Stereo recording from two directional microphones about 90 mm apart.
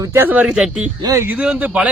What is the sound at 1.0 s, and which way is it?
Speech, 40° right (ahead or behind).